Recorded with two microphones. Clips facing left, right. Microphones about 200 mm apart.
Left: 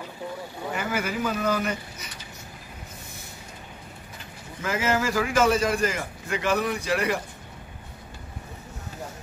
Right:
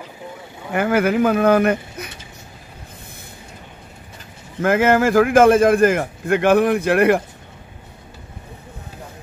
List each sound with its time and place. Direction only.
0.7 s a man's voice: 60° right (ahead or behind)
4.6 s a man's voice: 55° right (ahead or behind)